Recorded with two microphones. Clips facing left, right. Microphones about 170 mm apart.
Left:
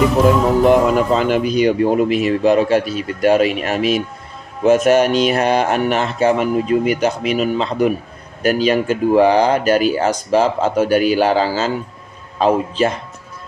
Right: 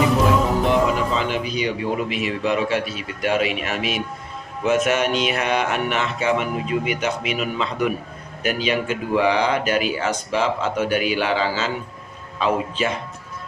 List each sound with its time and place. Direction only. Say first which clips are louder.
0.6 s speech: left 7 dB; 50° left (ahead or behind)